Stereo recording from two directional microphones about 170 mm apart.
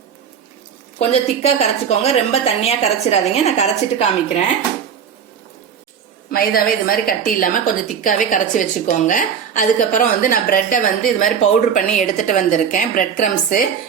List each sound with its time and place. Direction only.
0.9 s a woman's voice: 35° left (ahead or behind)
6.3 s a woman's voice: 60° left (ahead or behind)